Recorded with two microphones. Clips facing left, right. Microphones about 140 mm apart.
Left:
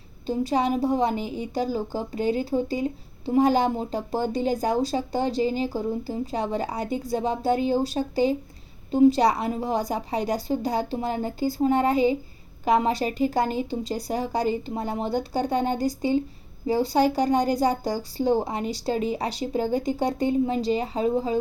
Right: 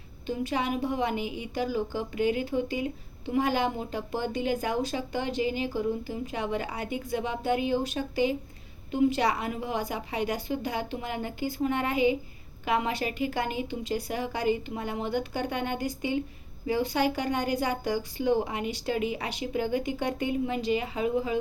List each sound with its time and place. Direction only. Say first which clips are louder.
0.3 s a woman's voice: left 6 dB; 35° left (ahead or behind)